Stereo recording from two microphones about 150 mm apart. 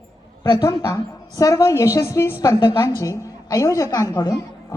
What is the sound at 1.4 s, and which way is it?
A woman's voice, 20° left (ahead or behind).